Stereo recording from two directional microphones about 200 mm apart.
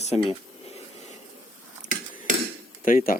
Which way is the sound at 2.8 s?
45° left (ahead or behind).